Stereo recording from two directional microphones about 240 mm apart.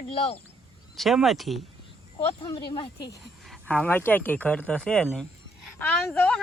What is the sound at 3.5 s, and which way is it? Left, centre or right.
Speech, centre.